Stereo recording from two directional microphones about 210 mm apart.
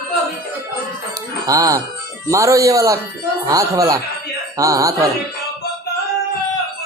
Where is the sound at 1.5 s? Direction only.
15° right (ahead or behind).